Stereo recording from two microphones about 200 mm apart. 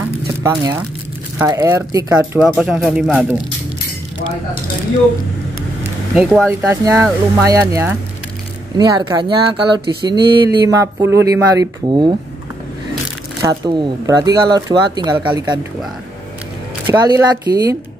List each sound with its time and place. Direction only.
0.4 s speech: 10° right (ahead or behind)
2.4 s speech: 5° right (ahead or behind)
6.1 s speech: centre (ahead or behind)
6.7 s speech: 10° right (ahead or behind)
13.4 s speech: 20° right (ahead or behind)
16.9 s speech: 20° right (ahead or behind)